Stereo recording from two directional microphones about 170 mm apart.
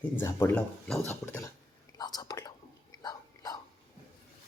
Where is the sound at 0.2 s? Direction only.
15° left (ahead or behind).